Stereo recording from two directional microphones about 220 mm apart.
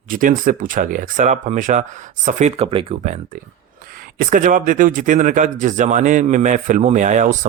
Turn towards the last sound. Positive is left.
turn(degrees=-35)  # may be behind; listen again after turning